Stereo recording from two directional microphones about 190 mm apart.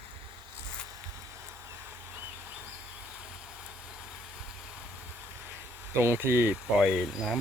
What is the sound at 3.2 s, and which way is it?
Vehicle, 5° right (ahead or behind).